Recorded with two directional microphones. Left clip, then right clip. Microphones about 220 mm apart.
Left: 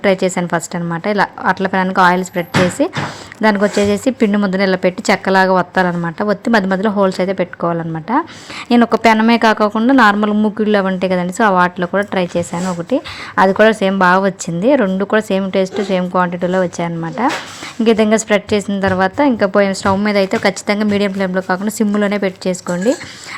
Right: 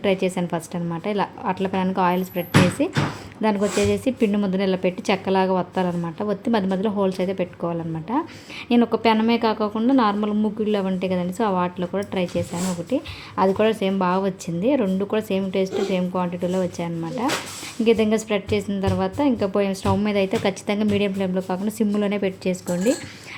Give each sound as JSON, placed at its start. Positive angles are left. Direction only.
{"t": 0.0, "sound": "a woman's voice", "side_deg": 15}